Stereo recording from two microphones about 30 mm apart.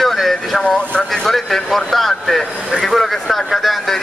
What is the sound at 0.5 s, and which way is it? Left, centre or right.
Speech, left.